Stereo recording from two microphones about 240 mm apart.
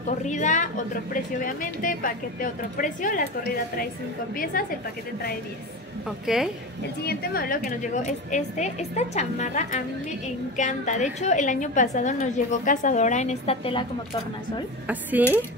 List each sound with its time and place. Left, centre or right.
0.2 s a woman's voice: left
4.6 s a woman's voice: left
6.0 s a woman's voice: centre
7.0 s a woman's voice: left
14.9 s speech: centre